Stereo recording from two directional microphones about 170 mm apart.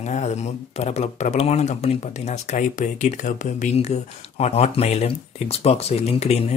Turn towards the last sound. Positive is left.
turn(degrees=35)  # may be behind; listen again after turning